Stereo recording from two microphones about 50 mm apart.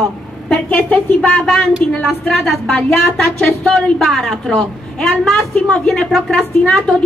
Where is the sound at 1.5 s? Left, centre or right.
Centre.